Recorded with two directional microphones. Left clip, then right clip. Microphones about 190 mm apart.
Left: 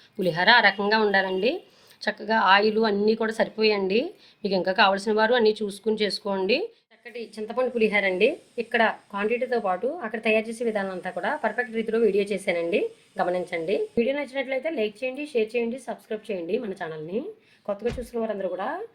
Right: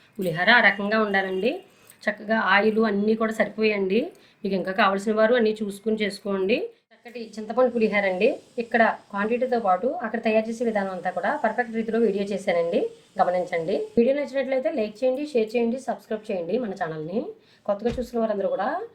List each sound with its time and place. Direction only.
0.2 s speech: 50° left (ahead or behind)